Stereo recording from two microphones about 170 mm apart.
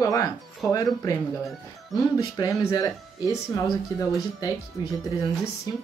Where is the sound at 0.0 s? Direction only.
20° left (ahead or behind).